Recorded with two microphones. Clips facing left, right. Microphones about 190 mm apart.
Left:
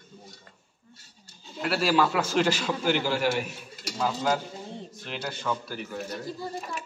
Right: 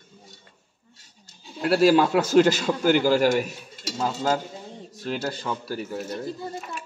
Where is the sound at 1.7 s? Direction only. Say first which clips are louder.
Right 6 dB; 40° right (ahead or behind).